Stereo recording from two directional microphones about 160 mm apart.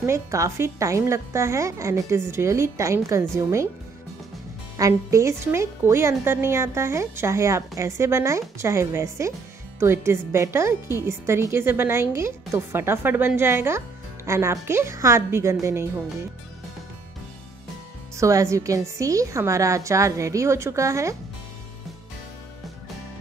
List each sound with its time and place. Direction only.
0.0 s a woman's voice: 20° right (ahead or behind)
4.7 s speech: 20° right (ahead or behind)
18.1 s a woman's voice: 20° right (ahead or behind)